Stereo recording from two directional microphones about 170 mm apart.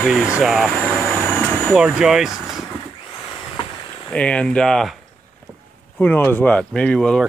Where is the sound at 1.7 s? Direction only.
5° right (ahead or behind).